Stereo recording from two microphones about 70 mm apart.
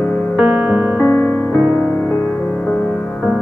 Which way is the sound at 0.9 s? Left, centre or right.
Left.